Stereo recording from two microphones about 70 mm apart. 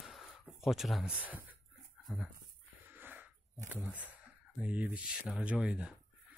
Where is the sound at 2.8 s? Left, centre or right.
Right.